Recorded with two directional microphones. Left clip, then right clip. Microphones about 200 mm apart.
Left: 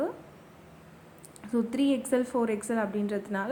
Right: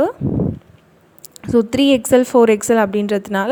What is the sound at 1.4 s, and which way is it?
A woman's voice, 40° right (ahead or behind).